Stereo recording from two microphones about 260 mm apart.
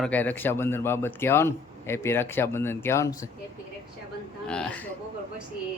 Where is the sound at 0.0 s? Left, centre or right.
Centre.